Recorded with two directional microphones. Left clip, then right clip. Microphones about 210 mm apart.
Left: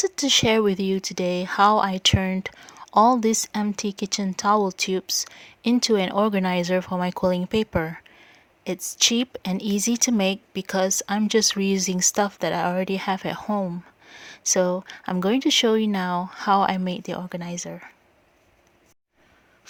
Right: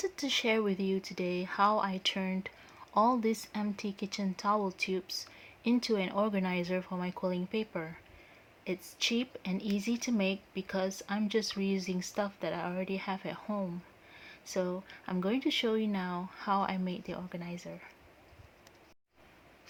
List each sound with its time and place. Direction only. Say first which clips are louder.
0.0 s speech: left 12 dB; 50° left (ahead or behind)